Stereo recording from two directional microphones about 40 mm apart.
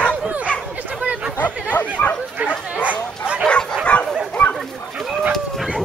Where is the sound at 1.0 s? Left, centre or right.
Right.